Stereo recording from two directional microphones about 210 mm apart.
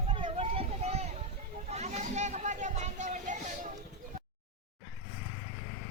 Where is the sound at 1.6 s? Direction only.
30° right (ahead or behind).